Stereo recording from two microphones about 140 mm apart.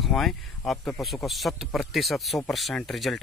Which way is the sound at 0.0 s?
Centre (ahead or behind).